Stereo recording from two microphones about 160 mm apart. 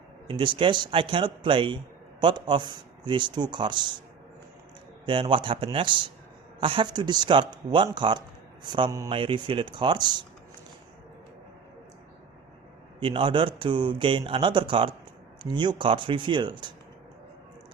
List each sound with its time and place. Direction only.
0.3 s a man's voice: 30° right (ahead or behind)
5.0 s a man's voice: 30° right (ahead or behind)
13.0 s a man's voice: 30° right (ahead or behind)